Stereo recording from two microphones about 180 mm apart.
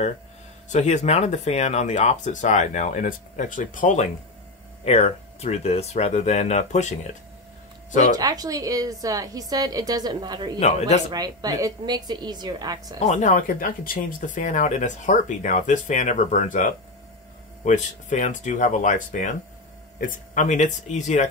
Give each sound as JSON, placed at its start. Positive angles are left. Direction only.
{"t": 0.7, "sound": "speech", "side_deg": 40}
{"t": 8.2, "sound": "a woman's voice", "side_deg": -20}
{"t": 13.0, "sound": "speech", "side_deg": 40}